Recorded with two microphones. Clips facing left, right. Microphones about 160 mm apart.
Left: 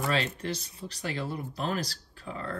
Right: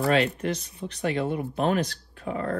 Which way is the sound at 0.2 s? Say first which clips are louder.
Right 7 dB; 30° left (ahead or behind).